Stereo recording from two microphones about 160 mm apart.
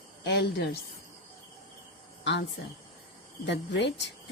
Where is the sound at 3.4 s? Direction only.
90° left.